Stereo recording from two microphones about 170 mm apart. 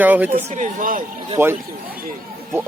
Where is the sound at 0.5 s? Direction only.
50° right (ahead or behind).